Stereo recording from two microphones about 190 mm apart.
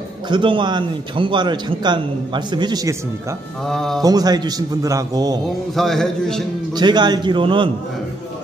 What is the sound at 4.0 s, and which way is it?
A man's voice, 20° right (ahead or behind).